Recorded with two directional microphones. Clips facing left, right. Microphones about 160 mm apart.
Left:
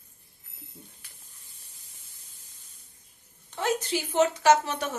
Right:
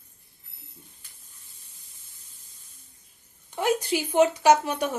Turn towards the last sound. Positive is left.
turn(degrees=-15)  # may be behind; listen again after turning